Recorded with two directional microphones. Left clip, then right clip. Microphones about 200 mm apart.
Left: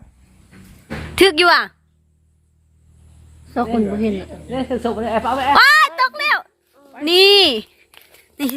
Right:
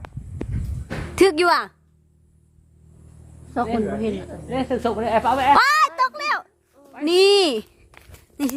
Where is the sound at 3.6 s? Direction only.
40° left (ahead or behind).